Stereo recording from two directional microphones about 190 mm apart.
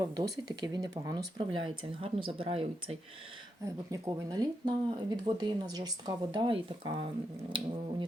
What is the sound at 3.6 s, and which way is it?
Speech, 20° right (ahead or behind).